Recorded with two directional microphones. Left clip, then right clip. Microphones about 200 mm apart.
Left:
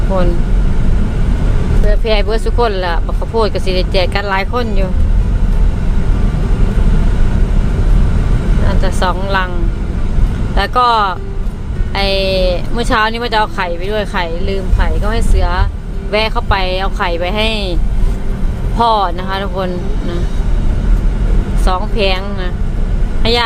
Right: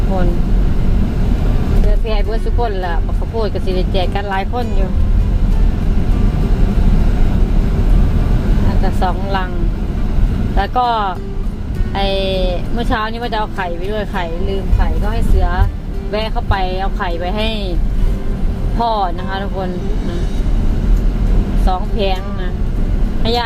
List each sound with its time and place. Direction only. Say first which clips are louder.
2.0 s speech: left 9 dB; 15° left (ahead or behind)
8.8 s speech: left 3 dB; centre (ahead or behind)
10.5 s speech: left 4 dB; centre (ahead or behind)
18.8 s speech: left 4 dB; 5° left (ahead or behind)
21.7 s speech: left 4 dB; centre (ahead or behind)
23.2 s speech: left 4 dB; centre (ahead or behind)